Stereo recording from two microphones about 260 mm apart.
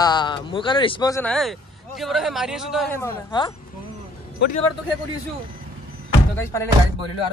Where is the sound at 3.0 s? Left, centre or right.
Centre.